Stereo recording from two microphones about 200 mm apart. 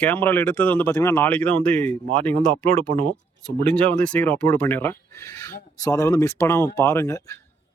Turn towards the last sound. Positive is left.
turn(degrees=15)  # may be behind; listen again after turning